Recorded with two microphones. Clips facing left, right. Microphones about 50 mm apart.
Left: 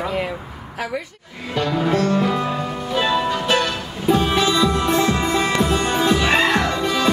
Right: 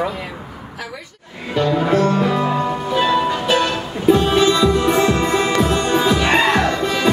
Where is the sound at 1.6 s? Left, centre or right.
Centre.